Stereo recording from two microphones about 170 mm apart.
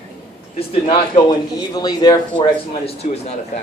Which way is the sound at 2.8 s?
35° left (ahead or behind).